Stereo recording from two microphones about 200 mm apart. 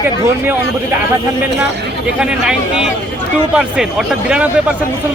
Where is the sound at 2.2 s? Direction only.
5° right (ahead or behind).